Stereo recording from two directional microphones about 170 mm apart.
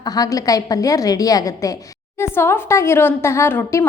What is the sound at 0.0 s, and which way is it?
A woman's voice, 20° left (ahead or behind).